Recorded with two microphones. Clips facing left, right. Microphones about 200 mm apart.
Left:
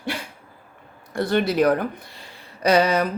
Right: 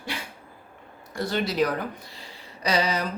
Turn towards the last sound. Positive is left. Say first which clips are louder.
# left 7 dB
turn(degrees=55)  # may be behind; listen again after turning